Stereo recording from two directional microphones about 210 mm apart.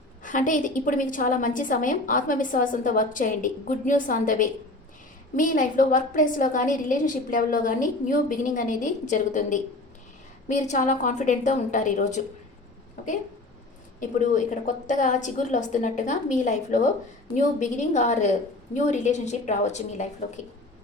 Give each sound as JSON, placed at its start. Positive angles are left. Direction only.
{"t": 0.2, "sound": "a woman's voice", "side_deg": 40}
{"t": 14.0, "sound": "a woman's voice", "side_deg": 35}